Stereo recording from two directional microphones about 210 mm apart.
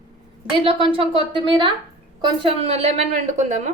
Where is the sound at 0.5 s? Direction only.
25° right (ahead or behind).